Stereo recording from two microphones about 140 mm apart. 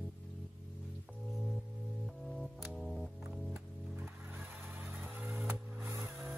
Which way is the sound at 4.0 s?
10° right (ahead or behind).